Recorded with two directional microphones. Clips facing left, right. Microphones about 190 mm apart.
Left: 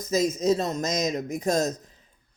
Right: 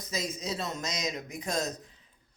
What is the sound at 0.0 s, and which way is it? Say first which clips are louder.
A man's voice: left 12 dB; 45° left (ahead or behind).